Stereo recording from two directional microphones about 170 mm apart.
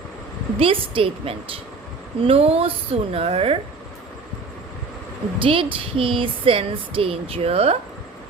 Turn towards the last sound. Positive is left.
turn(degrees=-35)  # may be behind; listen again after turning